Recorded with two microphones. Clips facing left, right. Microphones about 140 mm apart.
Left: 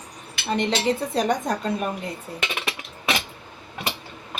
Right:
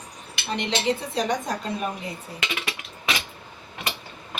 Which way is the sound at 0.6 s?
45° left (ahead or behind).